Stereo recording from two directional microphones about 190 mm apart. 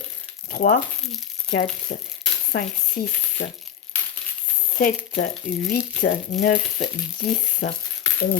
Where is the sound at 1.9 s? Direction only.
50° left (ahead or behind).